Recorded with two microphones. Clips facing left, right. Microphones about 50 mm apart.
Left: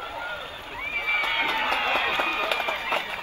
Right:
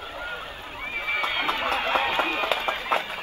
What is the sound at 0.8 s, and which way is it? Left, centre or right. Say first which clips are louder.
Neigh: left 1 dB; left.